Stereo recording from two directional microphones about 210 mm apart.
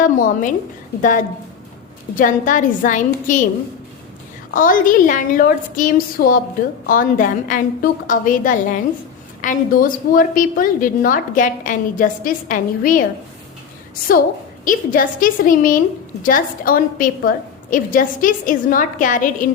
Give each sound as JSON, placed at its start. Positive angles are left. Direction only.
{"t": 0.0, "sound": "a woman's voice", "side_deg": 40}
{"t": 2.1, "sound": "a woman's voice", "side_deg": 40}
{"t": 4.5, "sound": "a woman's voice", "side_deg": 40}
{"t": 14.6, "sound": "a woman's voice", "side_deg": 40}